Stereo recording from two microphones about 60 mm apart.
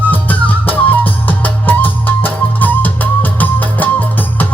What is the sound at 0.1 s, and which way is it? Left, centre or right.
Music, left.